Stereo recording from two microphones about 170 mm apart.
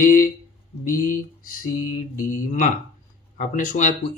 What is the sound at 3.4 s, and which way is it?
Speech, 50° left (ahead or behind).